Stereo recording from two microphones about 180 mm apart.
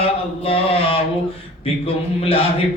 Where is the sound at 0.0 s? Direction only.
30° left (ahead or behind).